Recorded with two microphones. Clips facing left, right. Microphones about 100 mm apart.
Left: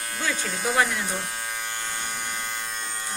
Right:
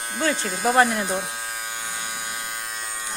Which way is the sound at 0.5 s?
5° right (ahead or behind).